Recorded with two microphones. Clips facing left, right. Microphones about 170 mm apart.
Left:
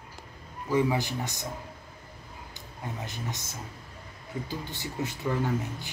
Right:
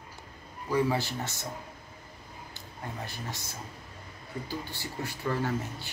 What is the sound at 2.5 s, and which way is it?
Speech, 20° left (ahead or behind).